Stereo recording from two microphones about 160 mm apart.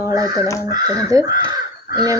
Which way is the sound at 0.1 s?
20° right (ahead or behind).